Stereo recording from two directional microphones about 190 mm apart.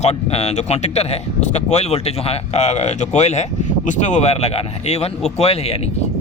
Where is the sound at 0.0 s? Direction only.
35° left (ahead or behind).